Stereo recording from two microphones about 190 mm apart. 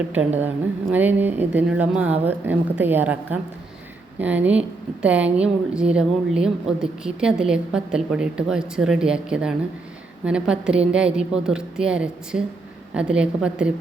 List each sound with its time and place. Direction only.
0.1 s a woman's voice: 10° right (ahead or behind)